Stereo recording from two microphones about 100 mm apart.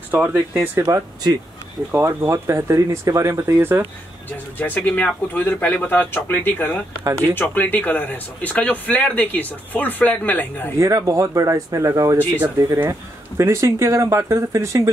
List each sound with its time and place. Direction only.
0.1 s speech: 20° right (ahead or behind)
1.9 s speech: 25° right (ahead or behind)
4.6 s speech: 15° left (ahead or behind)
10.8 s speech: 35° right (ahead or behind)